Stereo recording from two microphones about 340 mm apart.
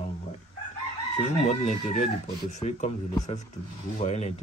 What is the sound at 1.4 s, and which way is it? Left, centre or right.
Speech, centre.